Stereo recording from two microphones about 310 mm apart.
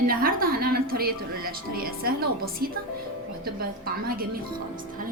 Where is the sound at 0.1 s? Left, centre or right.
Right.